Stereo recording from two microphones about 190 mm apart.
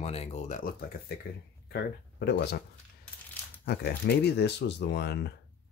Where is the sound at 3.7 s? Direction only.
55° left (ahead or behind).